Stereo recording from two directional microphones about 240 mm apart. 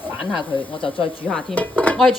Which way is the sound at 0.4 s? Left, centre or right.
Centre.